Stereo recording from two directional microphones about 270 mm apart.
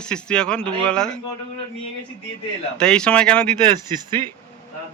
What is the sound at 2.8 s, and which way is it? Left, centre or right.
Speech, centre.